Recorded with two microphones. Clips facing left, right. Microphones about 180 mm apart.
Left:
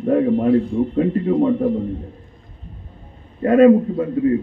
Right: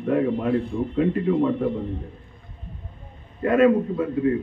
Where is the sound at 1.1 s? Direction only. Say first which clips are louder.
Left 4 dB; 40° left (ahead or behind).